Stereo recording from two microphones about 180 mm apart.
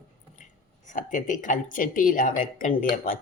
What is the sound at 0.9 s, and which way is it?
Cutlery, 45° left (ahead or behind).